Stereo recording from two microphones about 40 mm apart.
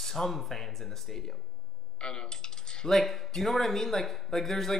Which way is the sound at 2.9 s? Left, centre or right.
Centre.